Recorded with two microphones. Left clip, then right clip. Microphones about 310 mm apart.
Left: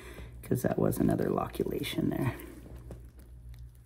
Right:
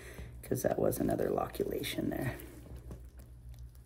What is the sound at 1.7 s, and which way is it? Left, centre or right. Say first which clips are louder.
Speech: left 3 dB; left.